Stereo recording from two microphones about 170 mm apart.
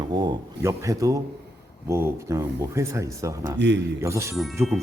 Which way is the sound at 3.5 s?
90° right.